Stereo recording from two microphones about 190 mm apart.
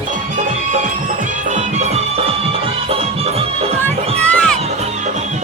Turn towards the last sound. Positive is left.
turn(degrees=5)  # may be behind; listen again after turning